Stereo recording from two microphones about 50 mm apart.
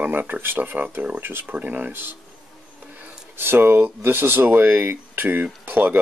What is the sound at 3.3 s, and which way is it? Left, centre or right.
Speech, right.